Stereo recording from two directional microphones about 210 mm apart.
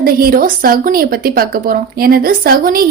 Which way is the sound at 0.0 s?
45° right (ahead or behind).